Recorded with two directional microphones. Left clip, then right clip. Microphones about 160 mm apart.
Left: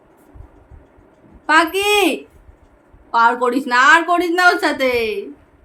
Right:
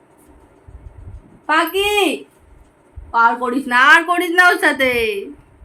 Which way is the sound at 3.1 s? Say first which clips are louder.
Left 1 dB; 15° left (ahead or behind).